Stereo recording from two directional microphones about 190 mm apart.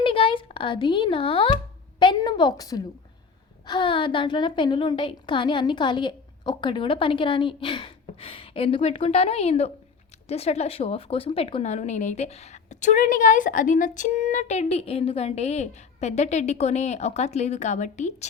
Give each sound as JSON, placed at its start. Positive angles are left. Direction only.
{"t": 0.0, "sound": "a woman's voice", "side_deg": 25}